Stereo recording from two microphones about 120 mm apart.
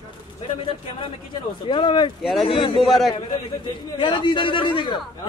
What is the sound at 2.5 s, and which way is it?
Speech, 40° left (ahead or behind).